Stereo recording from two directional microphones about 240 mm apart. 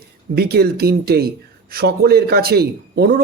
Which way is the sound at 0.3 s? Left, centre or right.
Right.